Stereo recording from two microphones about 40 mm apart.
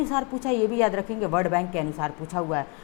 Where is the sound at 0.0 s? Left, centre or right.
Centre.